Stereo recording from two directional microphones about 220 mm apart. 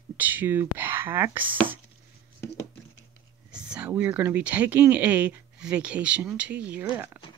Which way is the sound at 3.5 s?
5° right (ahead or behind).